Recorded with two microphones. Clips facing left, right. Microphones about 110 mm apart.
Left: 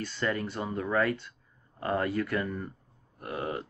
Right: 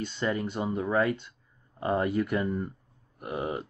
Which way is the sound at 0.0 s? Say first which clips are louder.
Right 1 dB; 20° right (ahead or behind).